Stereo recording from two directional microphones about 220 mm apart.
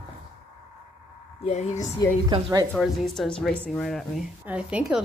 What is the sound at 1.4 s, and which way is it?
Speech, 30° left (ahead or behind).